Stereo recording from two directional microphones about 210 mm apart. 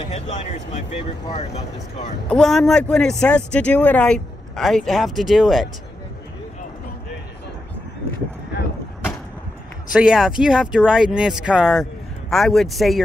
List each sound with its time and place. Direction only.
0.1 s speech: 30° left (ahead or behind)
2.2 s speech: centre (ahead or behind)
9.9 s speech: 5° right (ahead or behind)